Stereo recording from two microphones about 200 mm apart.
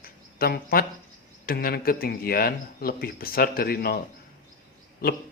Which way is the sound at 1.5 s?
45° left (ahead or behind).